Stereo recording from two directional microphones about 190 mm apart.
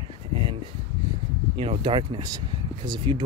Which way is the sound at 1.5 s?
25° right (ahead or behind).